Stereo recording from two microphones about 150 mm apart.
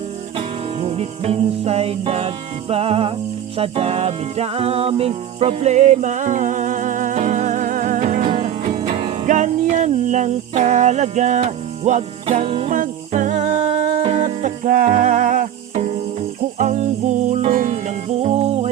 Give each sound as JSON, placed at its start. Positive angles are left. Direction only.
{"t": 0.3, "sound": "music", "side_deg": -40}
{"t": 8.7, "sound": "music", "side_deg": -30}
{"t": 9.2, "sound": "music", "side_deg": -55}
{"t": 12.7, "sound": "humming", "side_deg": -60}
{"t": 14.0, "sound": "music", "side_deg": -45}